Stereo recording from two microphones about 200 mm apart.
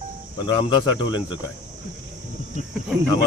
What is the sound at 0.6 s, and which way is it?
Speech, 20° left (ahead or behind).